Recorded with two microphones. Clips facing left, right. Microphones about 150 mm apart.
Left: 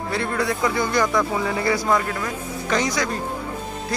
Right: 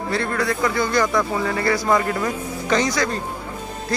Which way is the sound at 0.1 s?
10° left (ahead or behind).